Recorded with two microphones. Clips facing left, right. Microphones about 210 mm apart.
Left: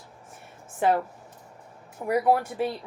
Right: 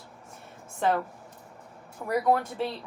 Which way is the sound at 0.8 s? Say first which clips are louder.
Left 3 dB; 15° left (ahead or behind).